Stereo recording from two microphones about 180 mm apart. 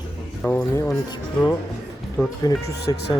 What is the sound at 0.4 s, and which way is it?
Music, 15° left (ahead or behind).